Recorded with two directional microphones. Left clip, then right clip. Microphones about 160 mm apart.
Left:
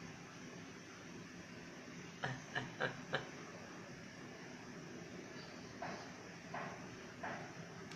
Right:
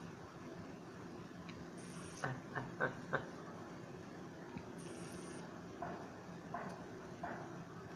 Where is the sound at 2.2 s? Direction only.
20° left (ahead or behind).